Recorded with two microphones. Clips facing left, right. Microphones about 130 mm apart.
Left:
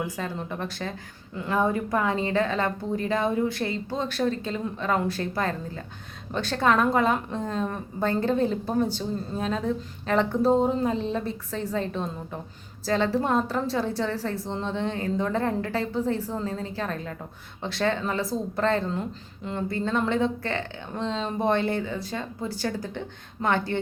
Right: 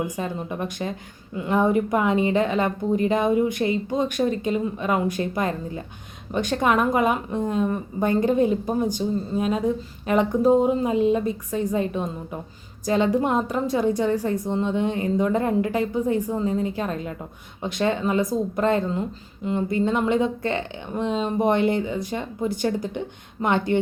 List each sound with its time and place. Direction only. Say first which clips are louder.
0.2 s a woman's voice: right 3 dB; 15° right (ahead or behind)